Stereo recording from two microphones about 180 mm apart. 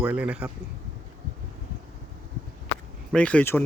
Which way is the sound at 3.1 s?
5° left (ahead or behind).